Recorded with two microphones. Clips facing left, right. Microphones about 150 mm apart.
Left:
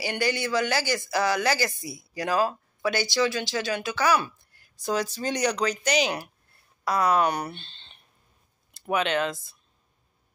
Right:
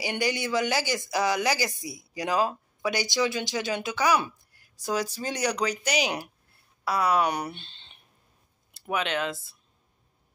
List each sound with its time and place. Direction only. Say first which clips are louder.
0.0 s speech: left 1 dB; 20° right (ahead or behind)